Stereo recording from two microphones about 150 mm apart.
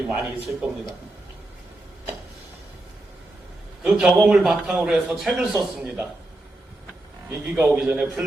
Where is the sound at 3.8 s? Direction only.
5° right (ahead or behind).